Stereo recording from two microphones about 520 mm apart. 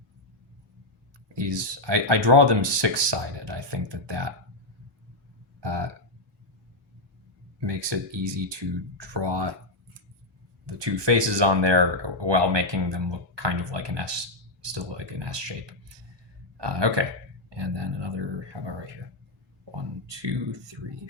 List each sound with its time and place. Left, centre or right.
1.3 s speech: right
5.5 s burping: right
7.6 s speech: right
10.7 s speech: right
16.6 s speech: right